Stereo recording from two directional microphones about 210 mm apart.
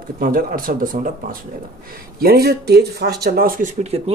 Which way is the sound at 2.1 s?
45° right (ahead or behind).